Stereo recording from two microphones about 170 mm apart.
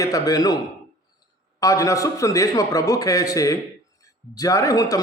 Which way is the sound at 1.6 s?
20° left (ahead or behind).